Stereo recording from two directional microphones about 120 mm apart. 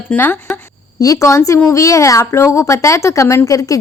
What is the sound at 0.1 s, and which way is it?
Speech, 15° left (ahead or behind).